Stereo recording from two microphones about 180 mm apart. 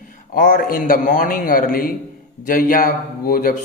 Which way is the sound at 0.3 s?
50° left (ahead or behind).